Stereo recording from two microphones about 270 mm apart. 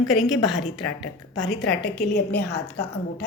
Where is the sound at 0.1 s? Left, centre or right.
Centre.